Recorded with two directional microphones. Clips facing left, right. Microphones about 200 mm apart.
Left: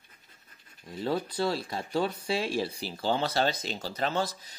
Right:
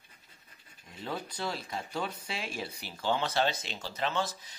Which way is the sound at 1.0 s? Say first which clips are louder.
Left 7 dB; 35° left (ahead or behind).